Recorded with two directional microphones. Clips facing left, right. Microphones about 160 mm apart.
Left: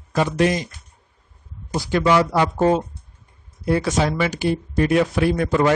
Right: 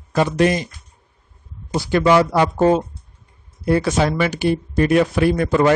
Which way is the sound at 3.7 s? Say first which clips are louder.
Right 2 dB; 60° right (ahead or behind).